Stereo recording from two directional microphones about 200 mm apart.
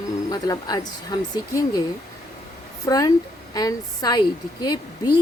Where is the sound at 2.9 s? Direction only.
15° left (ahead or behind).